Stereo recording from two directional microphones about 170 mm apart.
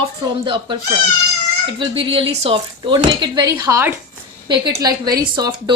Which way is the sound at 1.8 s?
30° right (ahead or behind).